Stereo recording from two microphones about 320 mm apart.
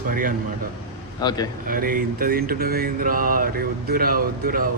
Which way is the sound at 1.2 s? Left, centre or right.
Centre.